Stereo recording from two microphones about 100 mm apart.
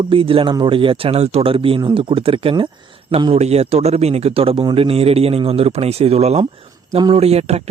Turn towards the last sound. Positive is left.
turn(degrees=-90)